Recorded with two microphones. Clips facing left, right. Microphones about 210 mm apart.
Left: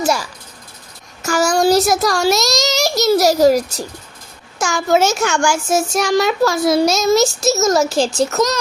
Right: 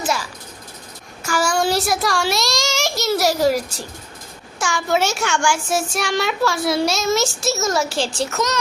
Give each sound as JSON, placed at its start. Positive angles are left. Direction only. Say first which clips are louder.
{"t": 1.2, "sound": "a child's voice", "louder": "left 5 dB", "side_deg": 40}